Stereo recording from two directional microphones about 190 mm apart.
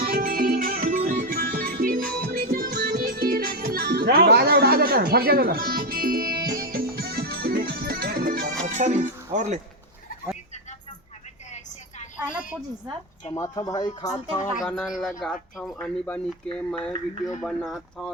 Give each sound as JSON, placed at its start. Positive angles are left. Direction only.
{"t": 0.1, "sound": "music", "side_deg": -50}
{"t": 8.6, "sound": "speech", "side_deg": -40}
{"t": 12.1, "sound": "a woman's voice", "side_deg": -5}
{"t": 13.3, "sound": "speech", "side_deg": 15}
{"t": 14.7, "sound": "speech", "side_deg": 0}